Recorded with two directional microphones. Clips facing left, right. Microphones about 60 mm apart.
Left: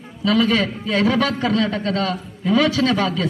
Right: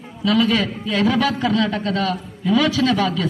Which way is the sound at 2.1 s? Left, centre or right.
Left.